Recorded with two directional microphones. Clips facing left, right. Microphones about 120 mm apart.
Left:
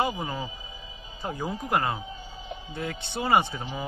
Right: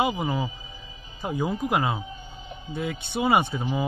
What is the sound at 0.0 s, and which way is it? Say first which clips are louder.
Speech: right 3 dB; 10° right (ahead or behind).